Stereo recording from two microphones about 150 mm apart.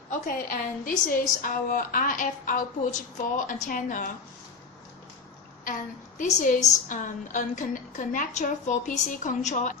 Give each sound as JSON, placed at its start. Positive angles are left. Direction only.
{"t": 0.1, "sound": "a woman's voice", "side_deg": 75}
{"t": 1.0, "sound": "a woman's voice", "side_deg": 65}
{"t": 6.1, "sound": "a woman's voice", "side_deg": 60}